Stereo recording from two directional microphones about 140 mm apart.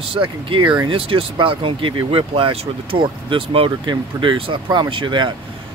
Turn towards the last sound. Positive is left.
turn(degrees=-35)  # may be behind; listen again after turning